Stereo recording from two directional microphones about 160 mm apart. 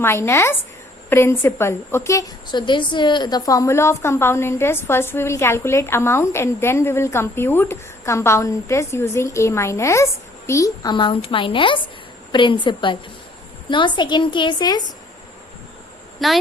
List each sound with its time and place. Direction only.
0.0 s a woman's voice: 15° left (ahead or behind)
16.2 s a woman's voice: centre (ahead or behind)